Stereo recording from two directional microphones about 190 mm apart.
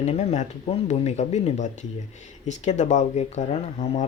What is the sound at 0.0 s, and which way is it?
Speech, 35° left (ahead or behind).